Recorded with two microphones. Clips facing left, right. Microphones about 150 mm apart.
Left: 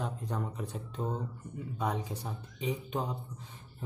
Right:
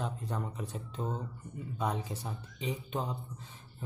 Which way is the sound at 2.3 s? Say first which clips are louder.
Left 3 dB; 10° left (ahead or behind).